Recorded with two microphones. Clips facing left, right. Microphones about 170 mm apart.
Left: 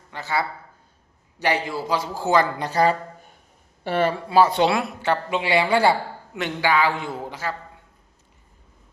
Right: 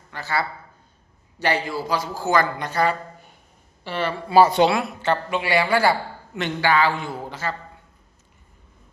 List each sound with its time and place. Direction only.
0.1 s a man's voice: 20° left (ahead or behind); by 3.2 s 35° left (ahead or behind)
3.8 s speech: 50° left (ahead or behind)
4.6 s a woman's voice: centre (ahead or behind)
5.0 s a man's voice: 15° left (ahead or behind)
6.3 s a man's voice: 10° left (ahead or behind)
7.2 s a man's voice: 10° left (ahead or behind)